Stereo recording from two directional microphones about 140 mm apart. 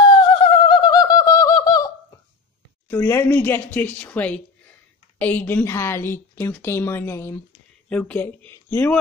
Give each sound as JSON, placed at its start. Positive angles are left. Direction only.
{"t": 0.0, "sound": "bird", "side_deg": 35}
{"t": 2.9, "sound": "a woman's voice", "side_deg": 15}